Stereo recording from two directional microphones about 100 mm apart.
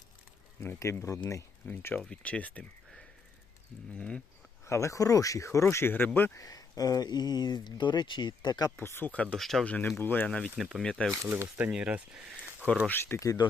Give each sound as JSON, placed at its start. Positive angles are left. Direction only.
{"t": 0.6, "sound": "speech", "side_deg": 25}
{"t": 1.6, "sound": "speech", "side_deg": 15}
{"t": 3.9, "sound": "speech", "side_deg": 10}
{"t": 4.6, "sound": "speech", "side_deg": 30}
{"t": 6.4, "sound": "speech", "side_deg": 35}
{"t": 8.7, "sound": "speech", "side_deg": 20}
{"t": 9.6, "sound": "speech", "side_deg": 15}
{"t": 10.6, "sound": "speech", "side_deg": -5}
{"t": 10.8, "sound": "speech", "side_deg": 10}
{"t": 11.1, "sound": "speech", "side_deg": -25}
{"t": 12.9, "sound": "speech", "side_deg": 20}
{"t": 13.2, "sound": "speech", "side_deg": 45}